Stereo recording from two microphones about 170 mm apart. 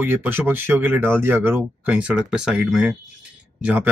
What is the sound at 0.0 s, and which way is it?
A man's voice, 10° right (ahead or behind).